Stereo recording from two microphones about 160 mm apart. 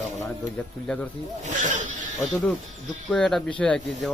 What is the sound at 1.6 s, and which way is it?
Speech, 50° right (ahead or behind).